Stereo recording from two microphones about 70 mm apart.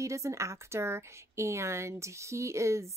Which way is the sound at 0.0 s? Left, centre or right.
Right.